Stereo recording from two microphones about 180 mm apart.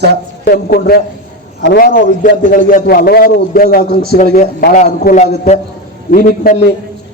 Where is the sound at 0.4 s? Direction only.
55° left (ahead or behind).